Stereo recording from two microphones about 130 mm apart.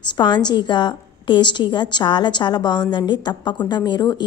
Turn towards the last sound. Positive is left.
turn(degrees=35)  # may be behind; listen again after turning